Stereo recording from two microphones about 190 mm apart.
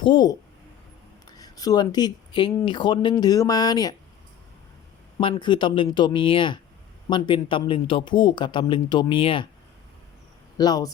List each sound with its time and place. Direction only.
0.0 s a man's voice: 25° left (ahead or behind)
1.4 s a man's voice: 20° left (ahead or behind)
5.3 s a man's voice: 25° left (ahead or behind)
10.6 s a man's voice: 20° left (ahead or behind)